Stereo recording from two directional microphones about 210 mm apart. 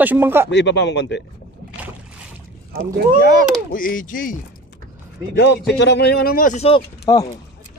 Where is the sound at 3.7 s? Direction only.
40° left (ahead or behind).